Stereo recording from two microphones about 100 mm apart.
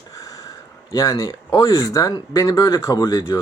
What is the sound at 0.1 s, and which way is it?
Speech, 35° left (ahead or behind).